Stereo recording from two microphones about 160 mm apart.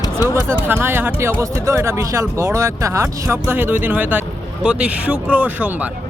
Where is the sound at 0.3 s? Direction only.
10° right (ahead or behind).